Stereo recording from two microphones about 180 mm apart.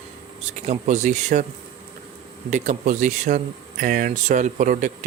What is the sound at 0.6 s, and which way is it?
Speech, 40° right (ahead or behind).